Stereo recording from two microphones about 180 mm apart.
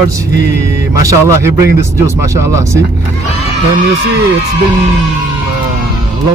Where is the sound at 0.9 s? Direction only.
15° right (ahead or behind).